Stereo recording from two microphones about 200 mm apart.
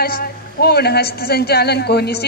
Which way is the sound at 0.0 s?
50° left (ahead or behind).